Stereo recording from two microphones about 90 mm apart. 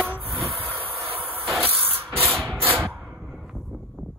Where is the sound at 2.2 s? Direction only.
Centre (ahead or behind).